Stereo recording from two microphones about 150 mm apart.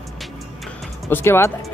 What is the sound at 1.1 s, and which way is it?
Speech, 15° left (ahead or behind).